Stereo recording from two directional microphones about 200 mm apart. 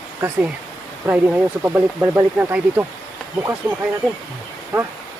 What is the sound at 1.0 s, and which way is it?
Speech, 10° right (ahead or behind).